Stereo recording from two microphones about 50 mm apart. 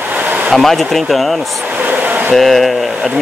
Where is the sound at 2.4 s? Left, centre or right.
Centre.